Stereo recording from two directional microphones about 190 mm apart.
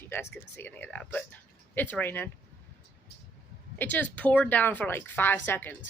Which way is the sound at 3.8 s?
10° left (ahead or behind).